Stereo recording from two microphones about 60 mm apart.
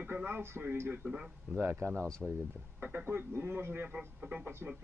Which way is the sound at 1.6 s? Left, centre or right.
Right.